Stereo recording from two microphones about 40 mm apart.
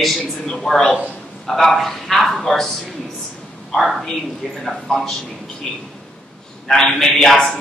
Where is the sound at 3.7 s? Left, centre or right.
Centre.